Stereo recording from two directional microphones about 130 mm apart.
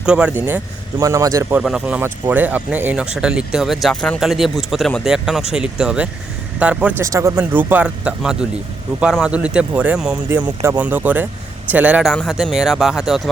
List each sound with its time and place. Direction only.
0.0 s a man's voice: 5° right (ahead or behind)
1.6 s speech: 10° right (ahead or behind)
7.0 s speech: 25° right (ahead or behind); by 13.2 s 5° right (ahead or behind)